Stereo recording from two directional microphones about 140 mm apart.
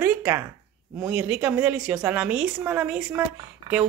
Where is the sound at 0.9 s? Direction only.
10° right (ahead or behind).